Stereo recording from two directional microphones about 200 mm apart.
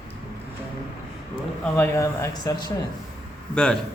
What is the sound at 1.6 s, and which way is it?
Speech, 10° left (ahead or behind).